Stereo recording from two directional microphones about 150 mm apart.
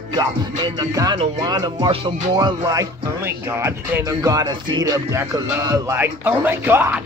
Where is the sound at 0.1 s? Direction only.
30° right (ahead or behind).